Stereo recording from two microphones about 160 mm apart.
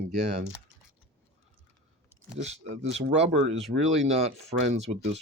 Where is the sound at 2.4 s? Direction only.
45° right (ahead or behind).